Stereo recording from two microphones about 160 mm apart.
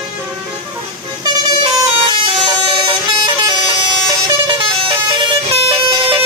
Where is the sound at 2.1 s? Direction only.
30° right (ahead or behind).